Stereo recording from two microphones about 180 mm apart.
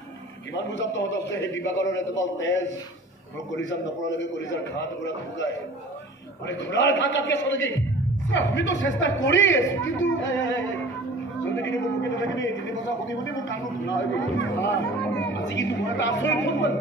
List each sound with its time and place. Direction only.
0.6 s a man's voice: 80° left
11.6 s speech: 85° left